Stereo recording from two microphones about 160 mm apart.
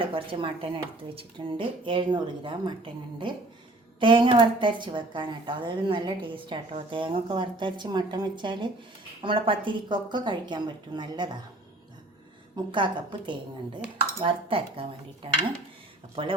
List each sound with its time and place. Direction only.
0.0 s a woman's voice: 35° right (ahead or behind)
12.7 s a woman's voice: 30° right (ahead or behind)